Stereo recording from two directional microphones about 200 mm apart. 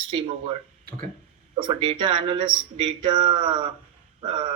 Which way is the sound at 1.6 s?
25° right (ahead or behind).